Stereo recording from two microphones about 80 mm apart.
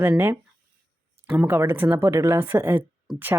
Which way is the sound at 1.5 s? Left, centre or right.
Right.